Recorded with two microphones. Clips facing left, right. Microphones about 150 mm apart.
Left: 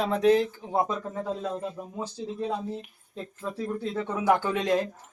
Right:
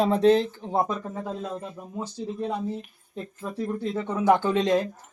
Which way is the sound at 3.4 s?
10° right (ahead or behind).